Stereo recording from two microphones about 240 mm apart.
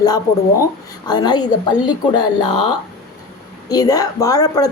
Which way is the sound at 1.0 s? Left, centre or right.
Centre.